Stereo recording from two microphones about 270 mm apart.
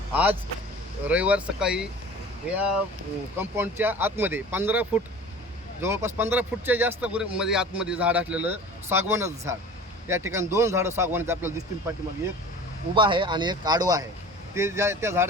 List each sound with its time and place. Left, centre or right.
0.1 s a man's voice: centre